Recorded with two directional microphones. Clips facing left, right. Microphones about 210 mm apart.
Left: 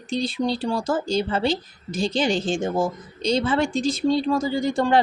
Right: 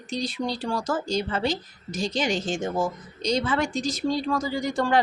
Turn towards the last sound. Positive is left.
turn(degrees=25)  # may be behind; listen again after turning